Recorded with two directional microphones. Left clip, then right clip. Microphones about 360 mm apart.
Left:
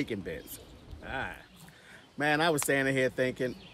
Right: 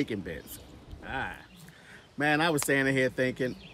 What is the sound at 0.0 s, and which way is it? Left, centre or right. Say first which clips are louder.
A man's voice: right 2 dB; centre.